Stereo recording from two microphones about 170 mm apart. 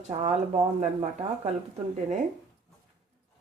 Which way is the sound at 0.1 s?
40° right (ahead or behind).